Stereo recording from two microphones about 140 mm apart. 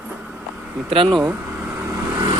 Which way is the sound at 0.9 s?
40° right (ahead or behind).